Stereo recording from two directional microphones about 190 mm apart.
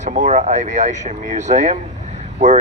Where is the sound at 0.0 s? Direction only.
40° right (ahead or behind).